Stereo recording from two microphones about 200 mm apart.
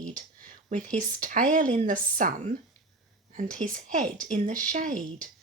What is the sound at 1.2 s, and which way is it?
Speech, 40° right (ahead or behind).